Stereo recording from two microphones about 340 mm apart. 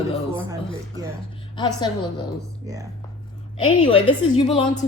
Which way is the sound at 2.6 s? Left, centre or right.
Centre.